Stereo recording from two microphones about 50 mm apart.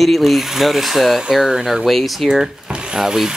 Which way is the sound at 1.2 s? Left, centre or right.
Centre.